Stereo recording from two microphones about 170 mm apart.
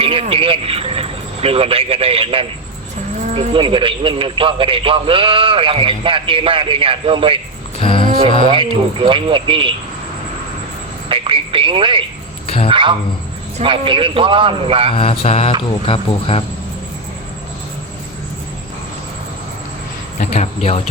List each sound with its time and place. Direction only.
0.0 s speech: 35° right (ahead or behind)
7.8 s speech: 30° left (ahead or behind)
8.4 s speech: 30° right (ahead or behind)
11.1 s speech: 30° right (ahead or behind)
12.5 s a sound: 35° left (ahead or behind)
12.7 s a man's voice: 30° right (ahead or behind)
14.9 s speech: 35° left (ahead or behind)
20.1 s speech: 45° left (ahead or behind)